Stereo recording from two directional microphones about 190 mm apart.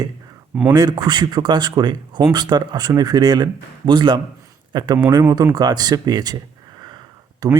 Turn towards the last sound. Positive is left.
turn(degrees=-20)  # may be behind; listen again after turning